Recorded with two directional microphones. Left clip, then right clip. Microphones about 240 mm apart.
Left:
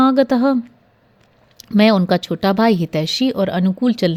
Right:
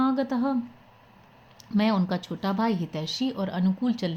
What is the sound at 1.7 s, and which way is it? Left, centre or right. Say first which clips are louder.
Speech: left 12 dB; left.